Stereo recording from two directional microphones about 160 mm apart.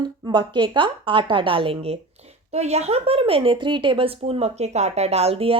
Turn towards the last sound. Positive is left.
turn(degrees=-35)  # may be behind; listen again after turning